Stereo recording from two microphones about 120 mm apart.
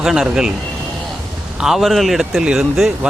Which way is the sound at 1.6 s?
Centre (ahead or behind).